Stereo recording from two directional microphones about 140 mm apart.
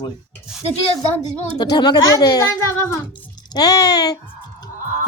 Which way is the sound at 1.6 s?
30° left (ahead or behind).